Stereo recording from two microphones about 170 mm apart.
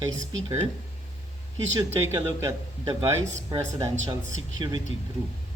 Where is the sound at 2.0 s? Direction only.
15° right (ahead or behind).